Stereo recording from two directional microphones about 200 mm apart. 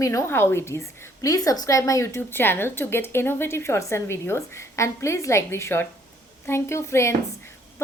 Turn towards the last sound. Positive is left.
turn(degrees=15)  # may be behind; listen again after turning